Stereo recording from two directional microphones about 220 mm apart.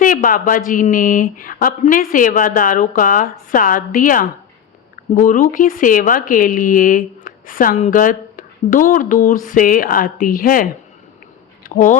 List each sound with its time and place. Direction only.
0.0 s speech: 40° left (ahead or behind)